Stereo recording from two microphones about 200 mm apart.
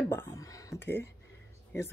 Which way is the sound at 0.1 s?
15° left (ahead or behind).